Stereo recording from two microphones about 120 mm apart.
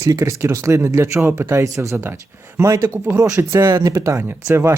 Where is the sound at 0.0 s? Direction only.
25° right (ahead or behind).